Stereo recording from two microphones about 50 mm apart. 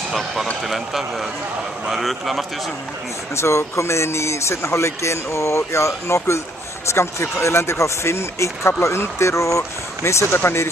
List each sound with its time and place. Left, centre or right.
0.1 s a man's voice: centre
3.3 s speech: left